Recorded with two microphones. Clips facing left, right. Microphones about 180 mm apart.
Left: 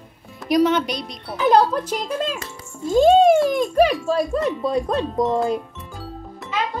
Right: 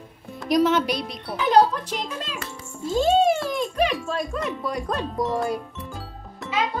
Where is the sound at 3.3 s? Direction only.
45° left (ahead or behind).